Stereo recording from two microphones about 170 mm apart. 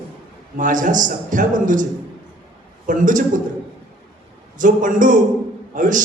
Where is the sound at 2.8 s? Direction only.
50° right (ahead or behind).